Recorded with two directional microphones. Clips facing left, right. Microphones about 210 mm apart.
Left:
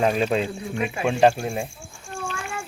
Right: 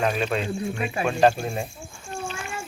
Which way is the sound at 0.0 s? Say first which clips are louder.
Left 3 dB; 30° left (ahead or behind).